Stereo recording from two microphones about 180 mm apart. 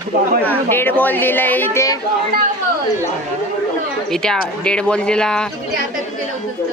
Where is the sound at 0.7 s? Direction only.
10° left (ahead or behind).